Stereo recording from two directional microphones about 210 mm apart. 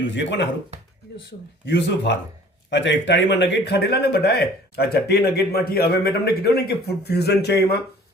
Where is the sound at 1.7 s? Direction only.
55° left (ahead or behind).